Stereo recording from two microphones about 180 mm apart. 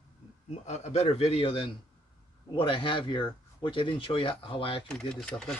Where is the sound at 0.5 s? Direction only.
40° left (ahead or behind).